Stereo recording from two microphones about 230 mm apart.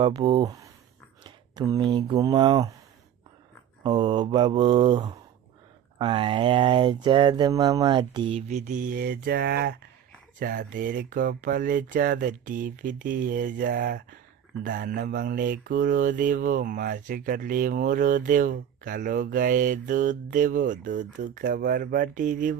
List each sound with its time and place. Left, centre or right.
0.0 s speech: right
3.8 s speech: right
10.4 s mantra: right